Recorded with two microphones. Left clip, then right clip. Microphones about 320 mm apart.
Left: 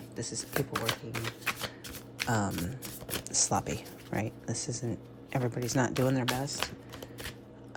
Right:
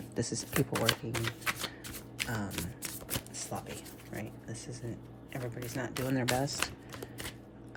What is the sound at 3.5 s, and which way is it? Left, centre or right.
Speech, left.